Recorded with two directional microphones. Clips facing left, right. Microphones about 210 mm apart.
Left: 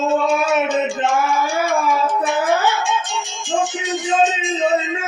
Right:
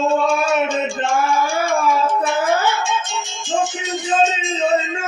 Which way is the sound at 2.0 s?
15° left (ahead or behind).